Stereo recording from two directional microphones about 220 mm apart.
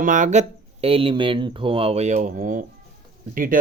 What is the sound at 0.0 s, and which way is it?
Speech, 35° right (ahead or behind).